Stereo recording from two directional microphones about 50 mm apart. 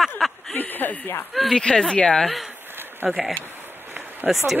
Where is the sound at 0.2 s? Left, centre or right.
Centre.